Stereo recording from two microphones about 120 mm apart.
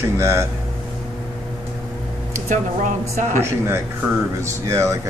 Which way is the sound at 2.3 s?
90° right.